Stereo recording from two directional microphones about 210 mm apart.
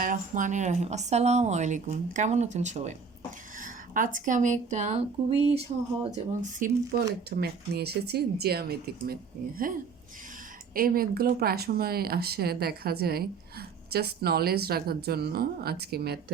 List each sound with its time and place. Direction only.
0.0 s a woman's voice: 40° right (ahead or behind)
7.3 s speech: 50° right (ahead or behind)
10.8 s speech: 45° right (ahead or behind)